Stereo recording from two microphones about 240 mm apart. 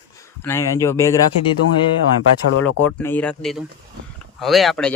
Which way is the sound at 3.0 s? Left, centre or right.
Centre.